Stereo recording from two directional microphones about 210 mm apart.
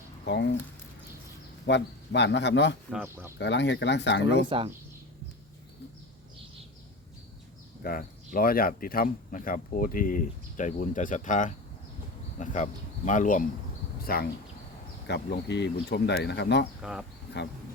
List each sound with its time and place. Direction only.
0.3 s speech: 55° left (ahead or behind)
1.6 s speech: 55° left (ahead or behind)
2.9 s speech: 10° right (ahead or behind)
3.3 s speech: 55° left (ahead or behind)
4.4 s speech: 25° right (ahead or behind)
7.8 s speech: 45° left (ahead or behind)
16.8 s speech: 5° right (ahead or behind)